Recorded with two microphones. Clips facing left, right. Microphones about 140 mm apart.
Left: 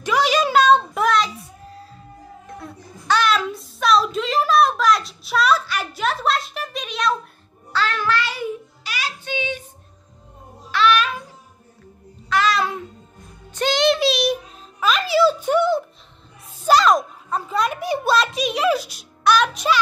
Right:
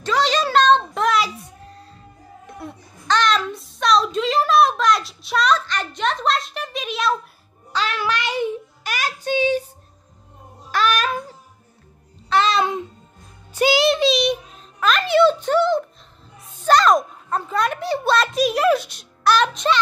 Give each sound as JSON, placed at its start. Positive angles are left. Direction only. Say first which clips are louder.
{"t": 0.0, "sound": "a sound", "louder": "left 1 dB", "side_deg": 10}
{"t": 1.1, "sound": "music", "louder": "left 1 dB", "side_deg": 0}
{"t": 3.1, "sound": "a sound", "louder": "even", "side_deg": 5}
{"t": 7.7, "sound": "child singing", "louder": "left 1 dB", "side_deg": -15}
{"t": 8.8, "sound": "child singing", "louder": "right 5 dB", "side_deg": -50}
{"t": 10.7, "sound": "babbling", "louder": "left 2 dB", "side_deg": -40}
{"t": 12.3, "sound": "music", "louder": "right 2 dB", "side_deg": -25}
{"t": 13.5, "sound": "a sound", "louder": "right 1 dB", "side_deg": -10}
{"t": 18.1, "sound": "music", "louder": "right 3 dB", "side_deg": 0}